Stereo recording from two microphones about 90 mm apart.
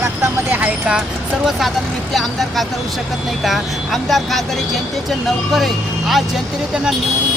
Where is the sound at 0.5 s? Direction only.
20° right (ahead or behind).